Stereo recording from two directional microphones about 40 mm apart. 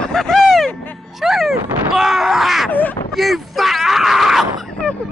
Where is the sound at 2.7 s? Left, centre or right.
Left.